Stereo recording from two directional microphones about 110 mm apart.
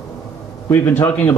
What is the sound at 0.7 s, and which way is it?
Speech, 15° left (ahead or behind).